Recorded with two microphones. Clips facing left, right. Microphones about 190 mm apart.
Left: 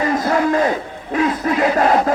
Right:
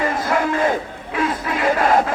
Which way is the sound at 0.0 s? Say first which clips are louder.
Left 3 dB; 40° left (ahead or behind).